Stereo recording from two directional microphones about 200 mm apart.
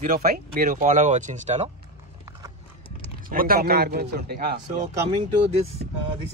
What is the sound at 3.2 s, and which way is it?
A man's voice, 45° right (ahead or behind).